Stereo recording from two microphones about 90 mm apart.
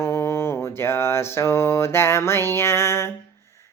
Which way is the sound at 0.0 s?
30° left (ahead or behind).